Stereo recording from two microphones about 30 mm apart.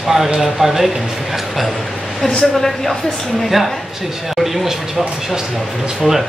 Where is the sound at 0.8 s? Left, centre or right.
Centre.